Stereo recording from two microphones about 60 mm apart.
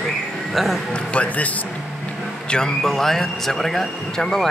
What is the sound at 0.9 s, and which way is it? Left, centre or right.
Speech, centre.